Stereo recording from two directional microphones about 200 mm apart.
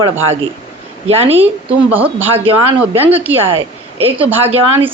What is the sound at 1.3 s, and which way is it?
A woman's voice, 10° right (ahead or behind).